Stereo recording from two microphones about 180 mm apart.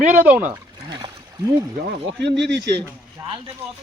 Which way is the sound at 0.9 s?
25° right (ahead or behind).